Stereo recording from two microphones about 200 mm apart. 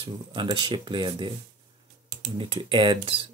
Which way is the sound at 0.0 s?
25° right (ahead or behind).